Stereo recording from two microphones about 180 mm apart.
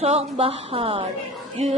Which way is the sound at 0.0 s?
35° right (ahead or behind).